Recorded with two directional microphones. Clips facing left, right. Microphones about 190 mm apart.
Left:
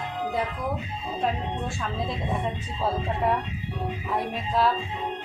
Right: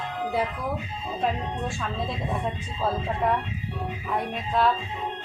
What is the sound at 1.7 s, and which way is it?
A woman's voice, centre (ahead or behind).